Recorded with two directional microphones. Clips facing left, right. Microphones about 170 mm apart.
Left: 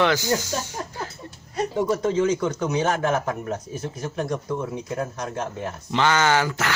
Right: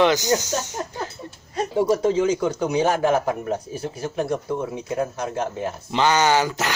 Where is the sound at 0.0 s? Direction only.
20° right (ahead or behind).